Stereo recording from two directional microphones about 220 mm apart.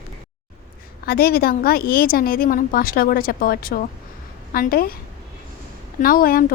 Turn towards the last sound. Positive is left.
turn(degrees=40)  # may be behind; listen again after turning